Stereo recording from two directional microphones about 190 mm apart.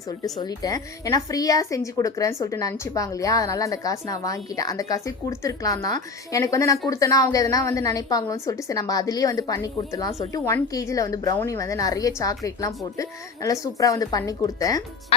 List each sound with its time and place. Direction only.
0.4 s a woman's voice: 20° left (ahead or behind)